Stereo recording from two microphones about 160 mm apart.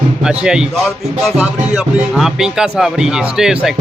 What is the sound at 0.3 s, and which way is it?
Music, 5° right (ahead or behind).